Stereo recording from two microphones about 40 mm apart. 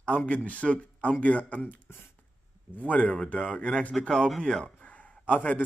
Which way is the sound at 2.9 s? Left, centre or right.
Left.